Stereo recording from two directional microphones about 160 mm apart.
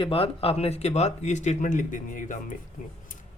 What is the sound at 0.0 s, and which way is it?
Speech, 35° left (ahead or behind).